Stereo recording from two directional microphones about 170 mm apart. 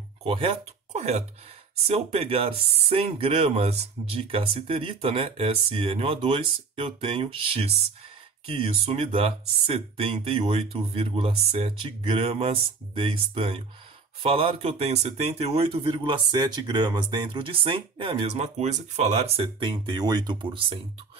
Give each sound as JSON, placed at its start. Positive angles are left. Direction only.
{"t": 0.2, "sound": "speech", "side_deg": -35}